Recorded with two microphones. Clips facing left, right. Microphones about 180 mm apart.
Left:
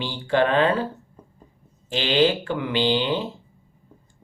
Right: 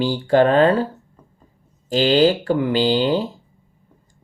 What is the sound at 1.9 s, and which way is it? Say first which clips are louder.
Speech: right 5 dB; 40° right (ahead or behind).